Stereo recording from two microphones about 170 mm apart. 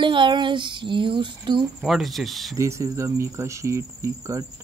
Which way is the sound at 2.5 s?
15° right (ahead or behind).